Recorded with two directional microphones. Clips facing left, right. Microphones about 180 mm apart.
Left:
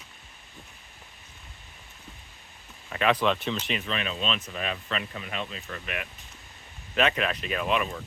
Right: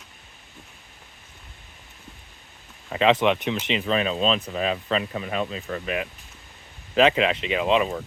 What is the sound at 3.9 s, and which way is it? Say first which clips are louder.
Speech: right 11 dB; 35° right (ahead or behind).